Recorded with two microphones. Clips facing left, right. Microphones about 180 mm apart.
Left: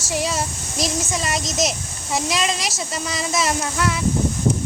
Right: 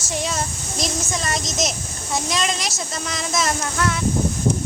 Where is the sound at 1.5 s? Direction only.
35° left (ahead or behind).